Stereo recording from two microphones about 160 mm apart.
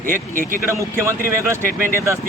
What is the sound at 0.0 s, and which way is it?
Speech, 60° right (ahead or behind).